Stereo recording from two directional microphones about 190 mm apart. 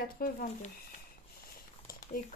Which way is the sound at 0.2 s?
45° left (ahead or behind).